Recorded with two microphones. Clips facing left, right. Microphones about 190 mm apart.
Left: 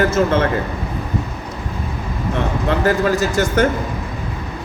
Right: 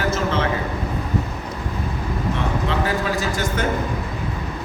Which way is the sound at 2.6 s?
45° left (ahead or behind).